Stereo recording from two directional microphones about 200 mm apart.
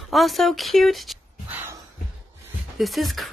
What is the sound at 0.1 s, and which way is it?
Speech, centre (ahead or behind).